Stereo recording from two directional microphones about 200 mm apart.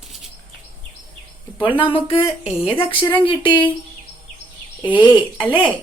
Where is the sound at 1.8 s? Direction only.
25° left (ahead or behind).